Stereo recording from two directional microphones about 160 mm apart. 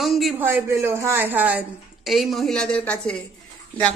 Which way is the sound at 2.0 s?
Centre (ahead or behind).